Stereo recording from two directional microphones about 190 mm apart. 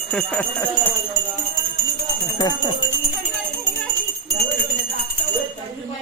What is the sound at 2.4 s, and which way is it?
Speech, 20° left (ahead or behind).